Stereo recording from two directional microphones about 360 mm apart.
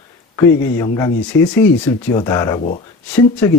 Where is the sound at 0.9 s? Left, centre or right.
Centre.